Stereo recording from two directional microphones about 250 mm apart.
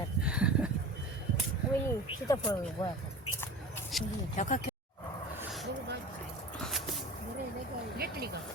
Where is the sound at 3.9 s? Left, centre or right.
Centre.